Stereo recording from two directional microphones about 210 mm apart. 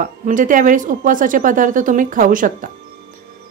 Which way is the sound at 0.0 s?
40° right (ahead or behind).